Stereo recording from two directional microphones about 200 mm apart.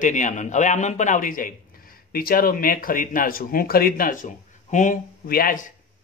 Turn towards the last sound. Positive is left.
turn(degrees=45)  # may be behind; listen again after turning